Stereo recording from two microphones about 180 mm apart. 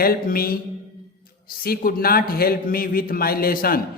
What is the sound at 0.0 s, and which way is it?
A man's voice, 55° left (ahead or behind).